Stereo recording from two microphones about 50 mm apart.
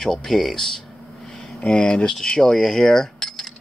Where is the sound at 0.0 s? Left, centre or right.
Centre.